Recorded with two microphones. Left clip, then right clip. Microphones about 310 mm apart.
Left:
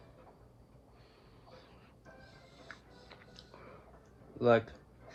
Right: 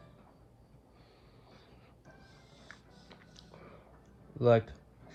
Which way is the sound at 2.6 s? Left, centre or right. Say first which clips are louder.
Left 2 dB; right.